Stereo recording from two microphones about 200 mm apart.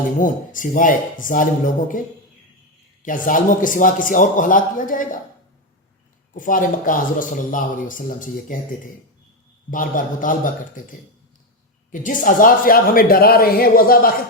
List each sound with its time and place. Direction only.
0.2 s a man's voice: 40° left (ahead or behind)
3.0 s a man's voice: 40° left (ahead or behind)
6.3 s a man's voice: 40° left (ahead or behind)
9.6 s a man's voice: 40° left (ahead or behind)
11.9 s speech: 40° left (ahead or behind)